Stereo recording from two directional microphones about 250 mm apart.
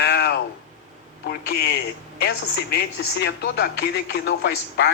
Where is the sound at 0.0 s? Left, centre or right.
Left.